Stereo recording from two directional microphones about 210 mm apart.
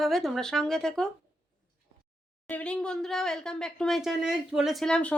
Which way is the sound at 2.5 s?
5° left (ahead or behind).